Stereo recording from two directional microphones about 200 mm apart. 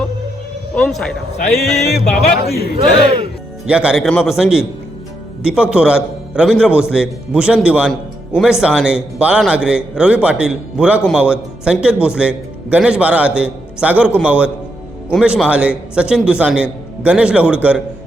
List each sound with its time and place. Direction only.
0.8 s a man's voice: 5° left (ahead or behind)
2.4 s speech: 50° left (ahead or behind)
3.7 s a man's voice: 5° right (ahead or behind)